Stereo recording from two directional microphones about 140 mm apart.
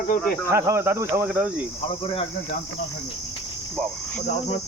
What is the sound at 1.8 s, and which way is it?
Speech, 40° left (ahead or behind).